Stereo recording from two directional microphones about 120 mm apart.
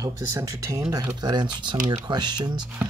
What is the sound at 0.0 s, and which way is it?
Speech, 30° right (ahead or behind).